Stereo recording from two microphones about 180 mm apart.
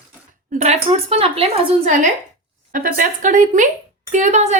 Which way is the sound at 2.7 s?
50° right (ahead or behind).